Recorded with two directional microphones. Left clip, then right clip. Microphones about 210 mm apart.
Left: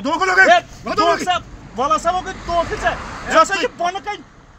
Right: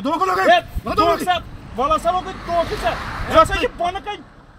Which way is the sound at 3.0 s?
55° left (ahead or behind).